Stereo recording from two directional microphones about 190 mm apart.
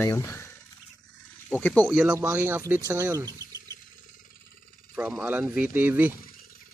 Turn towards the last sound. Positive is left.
turn(degrees=-10)  # may be behind; listen again after turning